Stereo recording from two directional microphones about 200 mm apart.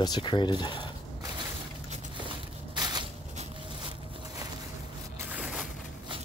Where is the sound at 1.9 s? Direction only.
25° right (ahead or behind).